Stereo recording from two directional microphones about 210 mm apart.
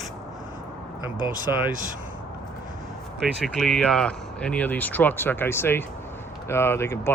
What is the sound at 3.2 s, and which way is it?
Speech, centre (ahead or behind).